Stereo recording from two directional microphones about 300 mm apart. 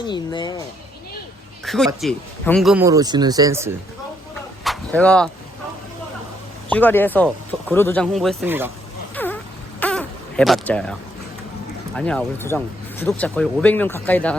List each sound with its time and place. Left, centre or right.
0.0 s speech: centre
1.6 s speech: centre
4.6 s whip: centre
6.7 s speech: centre
9.1 s a sound: centre
9.8 s baby cry: centre
11.9 s speech: centre